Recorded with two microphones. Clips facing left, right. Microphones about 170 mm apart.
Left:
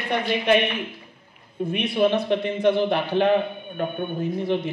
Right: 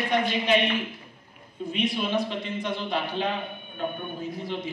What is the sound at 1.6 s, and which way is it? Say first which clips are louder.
A man's voice: left 7 dB; 60° left (ahead or behind).